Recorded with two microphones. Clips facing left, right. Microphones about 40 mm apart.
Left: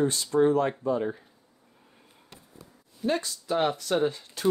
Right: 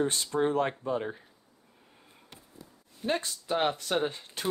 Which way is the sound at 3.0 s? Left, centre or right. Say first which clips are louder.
Left 3 dB; right.